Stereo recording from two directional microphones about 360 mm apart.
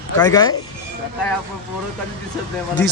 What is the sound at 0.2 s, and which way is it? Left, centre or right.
Speech, centre.